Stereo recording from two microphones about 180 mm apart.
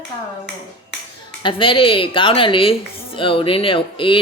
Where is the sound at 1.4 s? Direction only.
30° left (ahead or behind).